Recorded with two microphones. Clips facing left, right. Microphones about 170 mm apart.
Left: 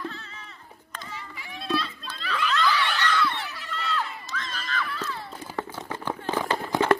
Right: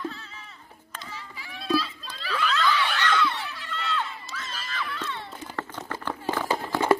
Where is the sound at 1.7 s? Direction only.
5° right (ahead or behind).